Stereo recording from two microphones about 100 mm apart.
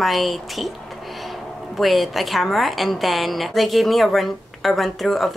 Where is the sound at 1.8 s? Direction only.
Centre (ahead or behind).